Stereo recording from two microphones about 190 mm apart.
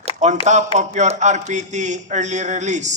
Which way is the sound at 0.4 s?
40° right (ahead or behind).